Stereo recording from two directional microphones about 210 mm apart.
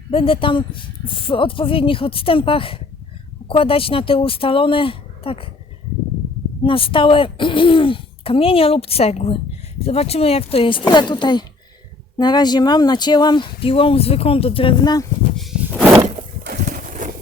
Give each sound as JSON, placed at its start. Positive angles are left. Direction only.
{"t": 0.1, "sound": "speech", "side_deg": 25}
{"t": 6.6, "sound": "speech", "side_deg": 25}
{"t": 15.4, "sound": "a sound", "side_deg": 0}
{"t": 17.0, "sound": "vehicle", "side_deg": -40}